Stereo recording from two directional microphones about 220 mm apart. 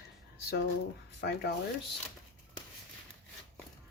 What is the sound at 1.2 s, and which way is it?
Speech, 50° left (ahead or behind).